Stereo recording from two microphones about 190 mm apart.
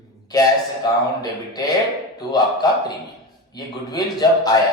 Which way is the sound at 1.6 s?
20° left (ahead or behind).